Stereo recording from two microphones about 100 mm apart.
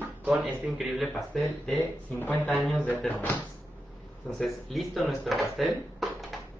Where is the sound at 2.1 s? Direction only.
20° left (ahead or behind).